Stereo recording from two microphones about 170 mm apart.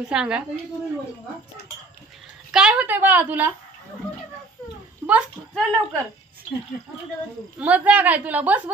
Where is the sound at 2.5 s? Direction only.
5° right (ahead or behind).